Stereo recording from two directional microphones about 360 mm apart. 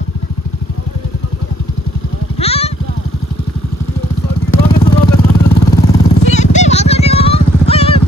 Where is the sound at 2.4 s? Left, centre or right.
Centre.